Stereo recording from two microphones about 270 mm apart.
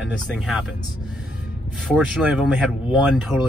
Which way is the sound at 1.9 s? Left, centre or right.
Centre.